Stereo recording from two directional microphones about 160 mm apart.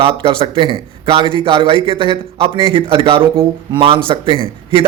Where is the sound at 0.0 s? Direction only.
35° right (ahead or behind).